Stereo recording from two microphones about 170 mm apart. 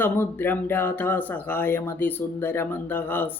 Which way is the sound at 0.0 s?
10° left (ahead or behind).